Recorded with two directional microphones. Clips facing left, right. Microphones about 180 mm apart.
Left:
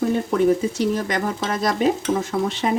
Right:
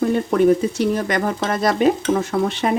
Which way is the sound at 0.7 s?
60° right (ahead or behind).